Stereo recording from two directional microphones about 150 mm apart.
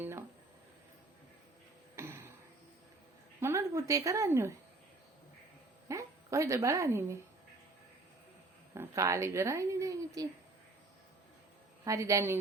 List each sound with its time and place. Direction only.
0.0 s a sound: 15° right (ahead or behind)
2.0 s a sound: 15° right (ahead or behind)
3.4 s a woman's voice: 15° right (ahead or behind)
5.9 s speech: 20° right (ahead or behind)
8.7 s a woman's voice: 20° right (ahead or behind)
11.9 s a woman's voice: 20° right (ahead or behind)